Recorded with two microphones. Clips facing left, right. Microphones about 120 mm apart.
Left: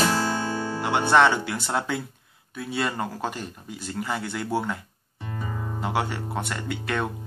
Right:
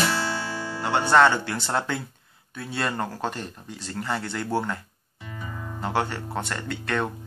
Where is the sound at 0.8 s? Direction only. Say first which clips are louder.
Right 1 dB; 10° left (ahead or behind).